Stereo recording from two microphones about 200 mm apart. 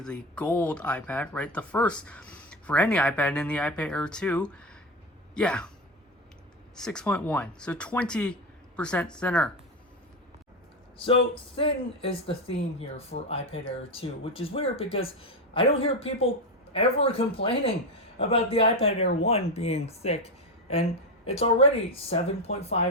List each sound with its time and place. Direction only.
0.0 s speech: 5° left (ahead or behind)
6.7 s speech: 5° left (ahead or behind)
11.0 s speech: 25° left (ahead or behind)